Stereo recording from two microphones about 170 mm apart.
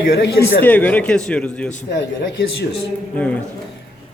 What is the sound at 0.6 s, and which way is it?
A man's voice, 10° left (ahead or behind).